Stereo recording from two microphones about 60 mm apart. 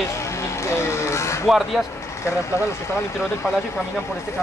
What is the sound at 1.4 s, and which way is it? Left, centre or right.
Speech, centre.